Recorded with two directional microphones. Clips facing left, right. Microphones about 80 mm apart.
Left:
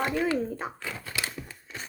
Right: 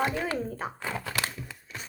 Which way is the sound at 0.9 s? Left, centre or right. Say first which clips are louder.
Right 3 dB; right.